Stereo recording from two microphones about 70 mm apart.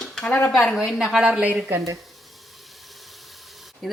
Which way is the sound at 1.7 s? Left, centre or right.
Right.